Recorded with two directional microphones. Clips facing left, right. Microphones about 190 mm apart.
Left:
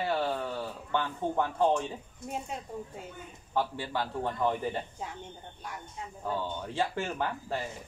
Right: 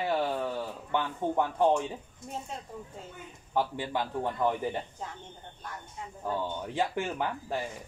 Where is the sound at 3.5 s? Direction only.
15° right (ahead or behind).